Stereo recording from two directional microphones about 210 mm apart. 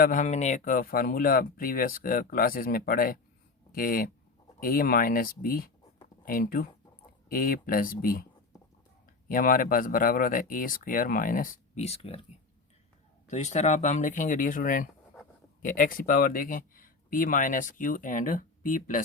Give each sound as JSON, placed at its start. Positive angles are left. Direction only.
{"t": 0.0, "sound": "speech", "side_deg": 35}
{"t": 9.3, "sound": "speech", "side_deg": 40}
{"t": 13.3, "sound": "speech", "side_deg": 35}